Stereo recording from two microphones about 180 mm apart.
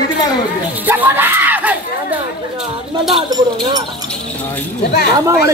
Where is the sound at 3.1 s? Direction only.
20° right (ahead or behind).